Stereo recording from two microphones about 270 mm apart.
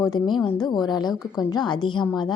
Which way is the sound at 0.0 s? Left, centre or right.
Centre.